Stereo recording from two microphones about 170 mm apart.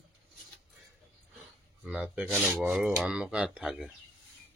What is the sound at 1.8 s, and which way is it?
Speech, 5° right (ahead or behind).